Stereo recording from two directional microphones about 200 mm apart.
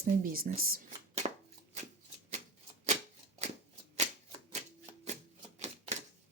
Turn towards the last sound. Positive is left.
turn(degrees=-35)  # may be behind; listen again after turning